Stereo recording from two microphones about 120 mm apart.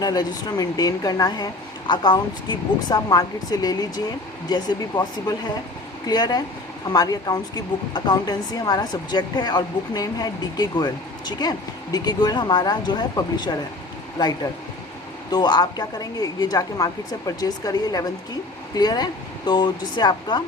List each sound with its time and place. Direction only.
0.0 s speech: 35° left (ahead or behind)